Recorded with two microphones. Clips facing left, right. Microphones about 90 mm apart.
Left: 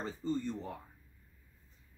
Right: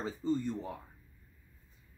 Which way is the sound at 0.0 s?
10° right (ahead or behind).